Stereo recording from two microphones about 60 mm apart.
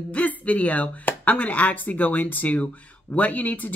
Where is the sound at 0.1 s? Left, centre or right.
Left.